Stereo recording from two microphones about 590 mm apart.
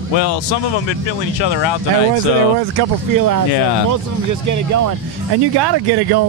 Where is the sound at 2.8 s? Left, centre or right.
Right.